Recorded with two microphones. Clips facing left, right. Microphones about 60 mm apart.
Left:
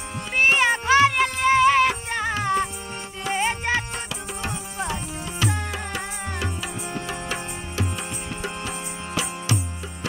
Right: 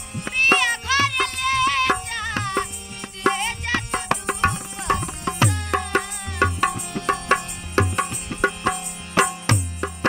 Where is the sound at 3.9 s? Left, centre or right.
Right.